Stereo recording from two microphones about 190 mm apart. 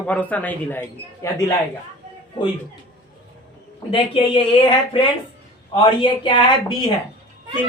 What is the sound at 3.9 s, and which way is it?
Speech, 25° left (ahead or behind).